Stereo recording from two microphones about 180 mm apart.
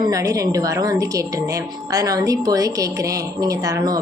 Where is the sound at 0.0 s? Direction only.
20° right (ahead or behind).